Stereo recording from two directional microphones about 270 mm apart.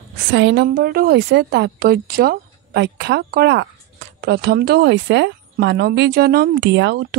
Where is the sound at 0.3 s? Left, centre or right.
Right.